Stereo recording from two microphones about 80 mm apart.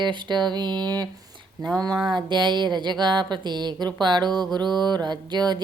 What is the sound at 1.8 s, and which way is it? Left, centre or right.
Speech, right.